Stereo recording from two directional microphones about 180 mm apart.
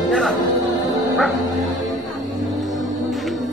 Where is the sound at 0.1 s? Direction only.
Centre (ahead or behind).